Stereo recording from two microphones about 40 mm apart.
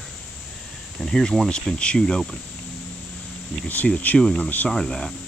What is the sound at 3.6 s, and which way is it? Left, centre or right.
Speech, left.